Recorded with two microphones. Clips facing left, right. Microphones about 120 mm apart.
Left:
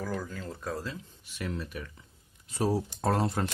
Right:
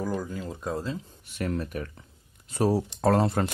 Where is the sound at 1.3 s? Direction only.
50° right (ahead or behind).